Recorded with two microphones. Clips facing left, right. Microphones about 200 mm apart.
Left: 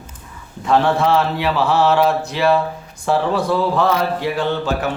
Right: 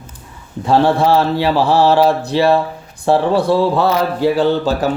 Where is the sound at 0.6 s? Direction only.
35° right (ahead or behind).